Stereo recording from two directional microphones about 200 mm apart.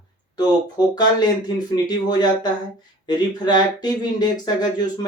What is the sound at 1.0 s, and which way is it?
Speech, 20° left (ahead or behind).